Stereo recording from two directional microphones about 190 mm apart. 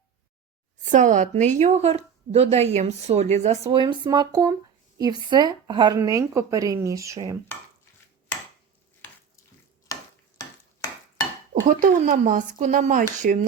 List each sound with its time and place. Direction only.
0.9 s a woman's voice: 40° right (ahead or behind); by 7.3 s 15° right (ahead or behind)
9.9 s stir: 20° left (ahead or behind)
11.7 s speech: 45° right (ahead or behind)